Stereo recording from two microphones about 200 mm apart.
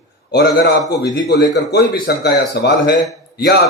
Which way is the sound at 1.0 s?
55° left (ahead or behind).